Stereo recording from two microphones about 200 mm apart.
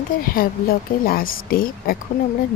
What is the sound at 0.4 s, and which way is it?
Speech, 45° left (ahead or behind).